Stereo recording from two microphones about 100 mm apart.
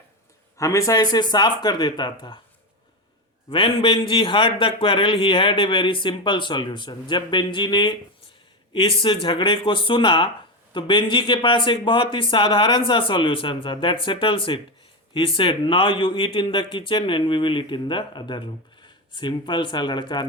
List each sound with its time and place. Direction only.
0.5 s speech: 30° left (ahead or behind); by 2.4 s 50° left (ahead or behind)
3.5 s a man's voice: 55° left (ahead or behind)
8.7 s a man's voice: 60° left (ahead or behind)